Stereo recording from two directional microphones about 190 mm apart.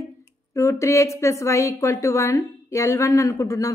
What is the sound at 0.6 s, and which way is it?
A woman's voice, 15° left (ahead or behind).